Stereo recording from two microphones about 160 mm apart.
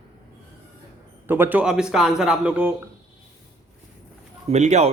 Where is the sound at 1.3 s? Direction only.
10° right (ahead or behind).